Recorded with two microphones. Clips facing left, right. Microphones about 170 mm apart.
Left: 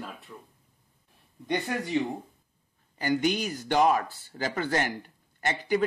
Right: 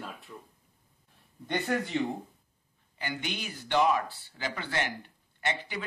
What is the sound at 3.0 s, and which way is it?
Speech, 40° left (ahead or behind).